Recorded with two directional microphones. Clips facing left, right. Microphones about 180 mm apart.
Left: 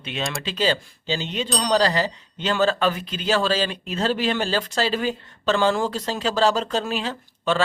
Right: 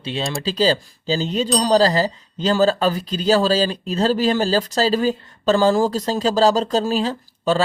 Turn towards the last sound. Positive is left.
turn(degrees=-35)  # may be behind; listen again after turning